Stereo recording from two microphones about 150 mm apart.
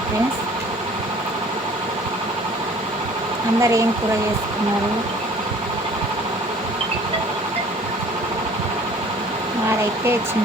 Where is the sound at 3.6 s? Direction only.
20° right (ahead or behind).